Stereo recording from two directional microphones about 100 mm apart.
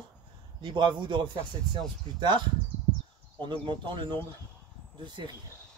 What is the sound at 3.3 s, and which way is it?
Speech, 55° right (ahead or behind).